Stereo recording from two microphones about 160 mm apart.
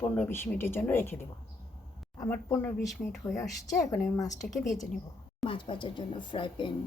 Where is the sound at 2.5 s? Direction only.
10° left (ahead or behind).